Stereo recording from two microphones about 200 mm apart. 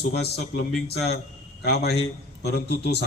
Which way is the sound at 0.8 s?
55° left (ahead or behind).